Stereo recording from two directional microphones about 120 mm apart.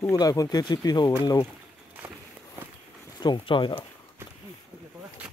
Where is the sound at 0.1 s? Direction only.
30° left (ahead or behind).